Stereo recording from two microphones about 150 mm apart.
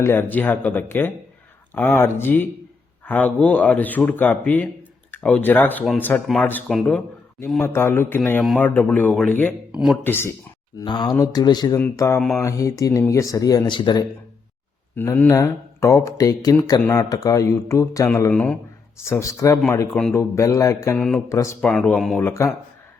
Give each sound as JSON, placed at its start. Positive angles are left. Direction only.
{"t": 0.0, "sound": "a man's voice", "side_deg": 15}
{"t": 7.3, "sound": "a man's voice", "side_deg": 15}
{"t": 9.7, "sound": "speech", "side_deg": -5}
{"t": 10.0, "sound": "a man's voice", "side_deg": 15}
{"t": 10.8, "sound": "a man's voice", "side_deg": 30}
{"t": 14.9, "sound": "speech", "side_deg": 15}
{"t": 18.3, "sound": "a man's voice", "side_deg": 10}
{"t": 19.0, "sound": "speech", "side_deg": 20}
{"t": 20.0, "sound": "speech", "side_deg": 5}
{"t": 20.3, "sound": "speech", "side_deg": 20}
{"t": 21.6, "sound": "speech", "side_deg": 5}
{"t": 22.2, "sound": "a man's voice", "side_deg": 15}